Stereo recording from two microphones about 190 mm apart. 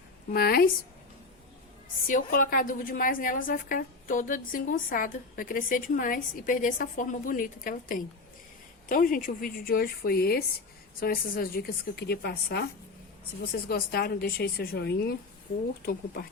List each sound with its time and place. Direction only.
0.3 s a woman's voice: 55° left (ahead or behind)
2.0 s a woman's voice: 45° left (ahead or behind)